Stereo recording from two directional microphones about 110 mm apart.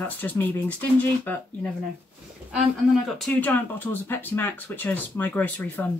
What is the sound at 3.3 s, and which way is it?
Speech, 15° left (ahead or behind).